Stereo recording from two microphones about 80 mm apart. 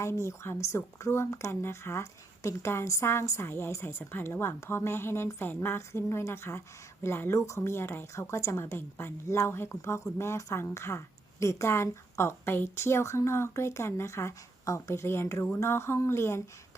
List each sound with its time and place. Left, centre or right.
0.0 s speech: left